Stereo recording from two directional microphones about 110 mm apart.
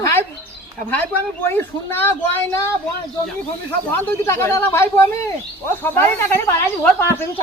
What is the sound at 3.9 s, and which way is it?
Speech, 20° left (ahead or behind).